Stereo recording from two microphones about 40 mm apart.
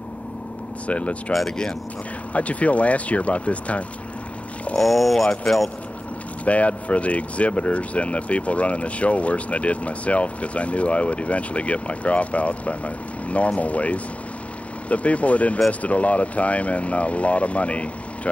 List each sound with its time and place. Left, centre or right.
0.8 s speech: left
2.3 s speech: left
4.7 s speech: centre
6.4 s speech: left